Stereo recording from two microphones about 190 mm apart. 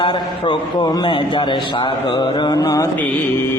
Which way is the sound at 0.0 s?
25° left (ahead or behind).